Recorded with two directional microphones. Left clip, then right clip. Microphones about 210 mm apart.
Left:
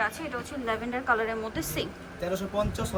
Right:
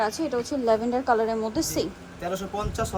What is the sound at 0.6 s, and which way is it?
A woman's voice, 30° right (ahead or behind).